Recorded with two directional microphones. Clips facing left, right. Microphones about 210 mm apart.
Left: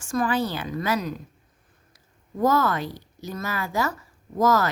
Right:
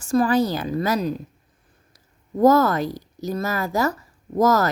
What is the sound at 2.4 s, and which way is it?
A woman's voice, 40° right (ahead or behind).